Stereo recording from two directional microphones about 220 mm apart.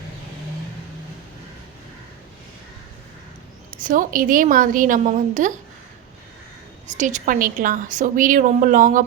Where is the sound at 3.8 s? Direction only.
35° right (ahead or behind).